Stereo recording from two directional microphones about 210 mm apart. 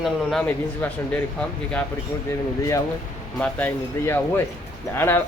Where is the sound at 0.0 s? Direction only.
Centre (ahead or behind).